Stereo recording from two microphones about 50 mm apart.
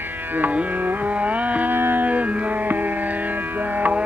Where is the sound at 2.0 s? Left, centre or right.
Right.